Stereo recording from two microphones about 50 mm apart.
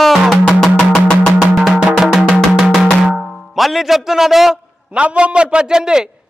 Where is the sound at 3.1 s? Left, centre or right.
Centre.